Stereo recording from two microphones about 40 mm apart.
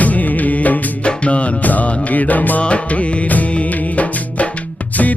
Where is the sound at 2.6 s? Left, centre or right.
Left.